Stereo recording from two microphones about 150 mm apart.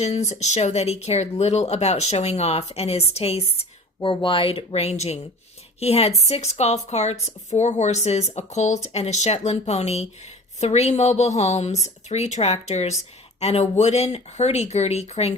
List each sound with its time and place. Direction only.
0.0 s speech: 45° left (ahead or behind)